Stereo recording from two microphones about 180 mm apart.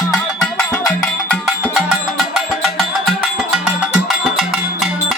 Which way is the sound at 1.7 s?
Centre (ahead or behind).